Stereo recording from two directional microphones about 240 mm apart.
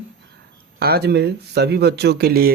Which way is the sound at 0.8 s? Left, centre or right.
Right.